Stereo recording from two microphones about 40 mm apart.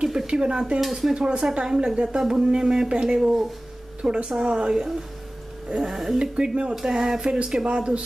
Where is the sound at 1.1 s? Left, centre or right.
Right.